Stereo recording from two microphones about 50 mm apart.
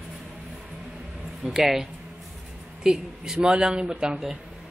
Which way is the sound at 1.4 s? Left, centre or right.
Centre.